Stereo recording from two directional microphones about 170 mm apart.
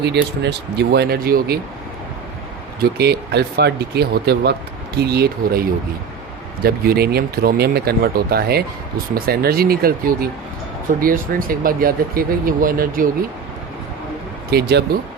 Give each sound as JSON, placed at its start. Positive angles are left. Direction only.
{"t": 0.0, "sound": "speech", "side_deg": -80}
{"t": 3.0, "sound": "speech", "side_deg": -70}
{"t": 14.5, "sound": "speech", "side_deg": -75}